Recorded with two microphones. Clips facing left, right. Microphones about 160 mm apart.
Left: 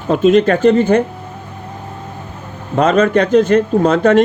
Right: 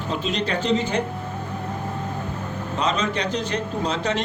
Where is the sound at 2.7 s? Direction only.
55° left (ahead or behind).